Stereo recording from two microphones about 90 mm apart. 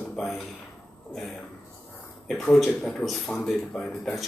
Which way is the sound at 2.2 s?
5° left (ahead or behind).